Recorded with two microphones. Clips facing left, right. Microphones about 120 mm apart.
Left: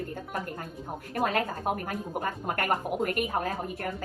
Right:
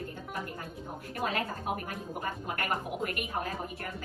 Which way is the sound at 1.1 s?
45° left (ahead or behind).